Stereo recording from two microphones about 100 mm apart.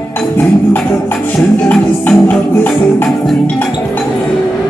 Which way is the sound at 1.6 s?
10° left (ahead or behind).